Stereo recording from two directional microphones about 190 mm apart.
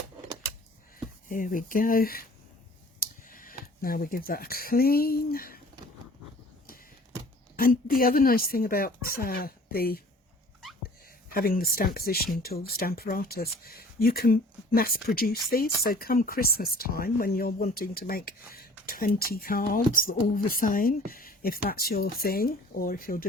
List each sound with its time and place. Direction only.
1.3 s speech: 45° left (ahead or behind)
3.0 s tick: 45° left (ahead or behind)
3.8 s speech: 50° left (ahead or behind)
7.5 s speech: 50° left (ahead or behind)
11.3 s speech: 50° left (ahead or behind)